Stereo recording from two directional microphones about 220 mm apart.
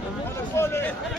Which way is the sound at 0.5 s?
10° left (ahead or behind).